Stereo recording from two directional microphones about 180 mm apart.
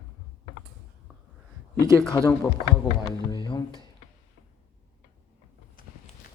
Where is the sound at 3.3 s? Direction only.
25° left (ahead or behind).